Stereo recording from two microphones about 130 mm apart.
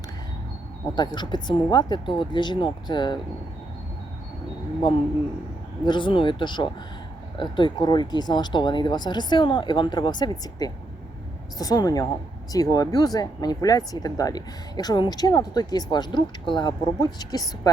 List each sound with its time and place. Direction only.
0.9 s speech: 35° left (ahead or behind)
5.8 s speech: 40° left (ahead or behind)